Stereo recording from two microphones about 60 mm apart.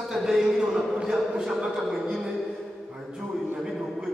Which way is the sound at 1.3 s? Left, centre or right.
Centre.